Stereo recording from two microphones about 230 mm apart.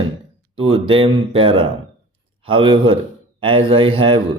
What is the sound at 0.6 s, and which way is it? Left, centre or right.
Speech, right.